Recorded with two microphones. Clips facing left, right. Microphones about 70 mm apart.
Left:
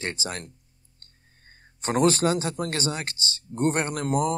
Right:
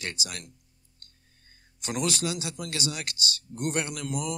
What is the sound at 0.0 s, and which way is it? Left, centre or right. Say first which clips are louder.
Speech: left 5 dB; left.